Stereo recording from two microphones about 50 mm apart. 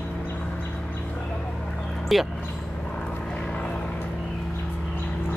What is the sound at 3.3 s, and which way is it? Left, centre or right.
Vehicle, centre.